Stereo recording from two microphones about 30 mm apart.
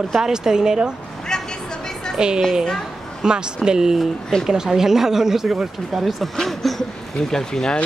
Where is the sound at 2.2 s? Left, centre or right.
Right; by 6.8 s centre.